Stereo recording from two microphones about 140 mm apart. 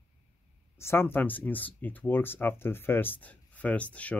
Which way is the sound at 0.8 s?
15° left (ahead or behind).